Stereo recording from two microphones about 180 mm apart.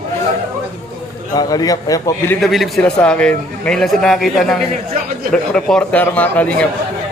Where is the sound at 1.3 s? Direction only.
20° left (ahead or behind).